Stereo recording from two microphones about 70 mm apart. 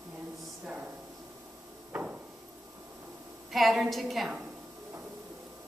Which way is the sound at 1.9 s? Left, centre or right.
Right.